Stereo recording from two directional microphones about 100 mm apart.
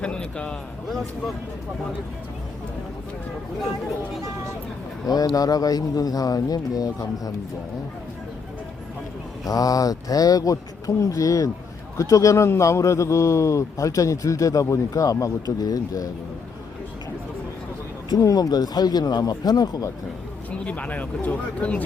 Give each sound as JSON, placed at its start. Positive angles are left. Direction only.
{"t": 0.0, "sound": "speech", "side_deg": 10}
{"t": 5.0, "sound": "a man's voice", "side_deg": 40}
{"t": 9.5, "sound": "a man's voice", "side_deg": 35}
{"t": 18.1, "sound": "a man's voice", "side_deg": 40}
{"t": 20.5, "sound": "speech", "side_deg": 15}